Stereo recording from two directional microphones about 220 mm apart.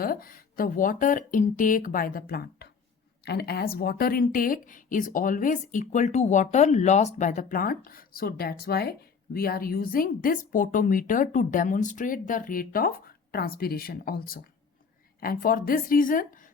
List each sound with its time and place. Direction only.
0.0 s speech: 40° left (ahead or behind)